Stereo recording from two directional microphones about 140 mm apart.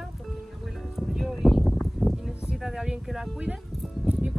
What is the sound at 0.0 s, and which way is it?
Music, centre (ahead or behind).